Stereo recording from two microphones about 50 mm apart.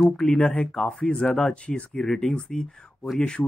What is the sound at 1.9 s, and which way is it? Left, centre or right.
Speech, centre.